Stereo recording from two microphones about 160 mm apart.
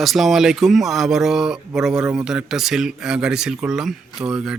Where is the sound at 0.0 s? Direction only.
Centre (ahead or behind).